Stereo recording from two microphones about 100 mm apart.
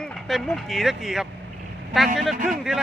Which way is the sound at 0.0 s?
Centre (ahead or behind).